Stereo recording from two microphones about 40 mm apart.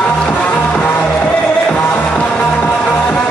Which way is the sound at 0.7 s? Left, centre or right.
Left.